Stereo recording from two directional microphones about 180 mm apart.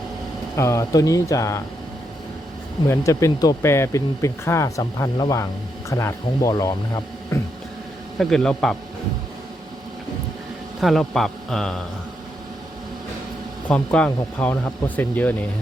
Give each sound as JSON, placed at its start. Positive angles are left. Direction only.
{"t": 0.5, "sound": "speech", "side_deg": 15}
{"t": 2.9, "sound": "speech", "side_deg": 15}
{"t": 8.2, "sound": "a man's voice", "side_deg": 5}
{"t": 10.8, "sound": "a man's voice", "side_deg": 0}
{"t": 13.7, "sound": "speech", "side_deg": 5}